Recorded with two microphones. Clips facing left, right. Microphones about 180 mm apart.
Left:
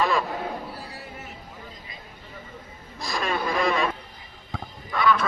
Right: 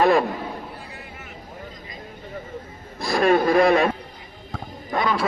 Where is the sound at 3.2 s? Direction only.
55° right (ahead or behind).